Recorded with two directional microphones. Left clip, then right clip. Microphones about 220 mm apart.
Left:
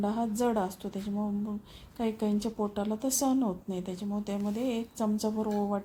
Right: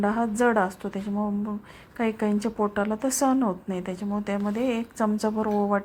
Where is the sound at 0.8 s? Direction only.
30° right (ahead or behind).